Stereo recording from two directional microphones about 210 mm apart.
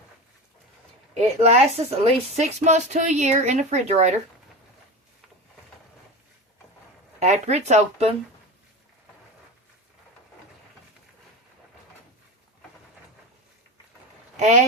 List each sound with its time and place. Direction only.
1.2 s a woman's voice: 30° right (ahead or behind)
7.2 s a woman's voice: 30° right (ahead or behind)